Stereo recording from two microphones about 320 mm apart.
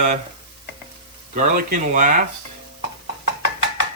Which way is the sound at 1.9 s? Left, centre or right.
Right.